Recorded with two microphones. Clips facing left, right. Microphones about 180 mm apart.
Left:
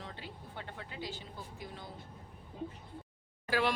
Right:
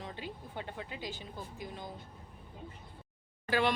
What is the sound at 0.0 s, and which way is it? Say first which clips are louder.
Speech: right 4 dB; 15° right (ahead or behind).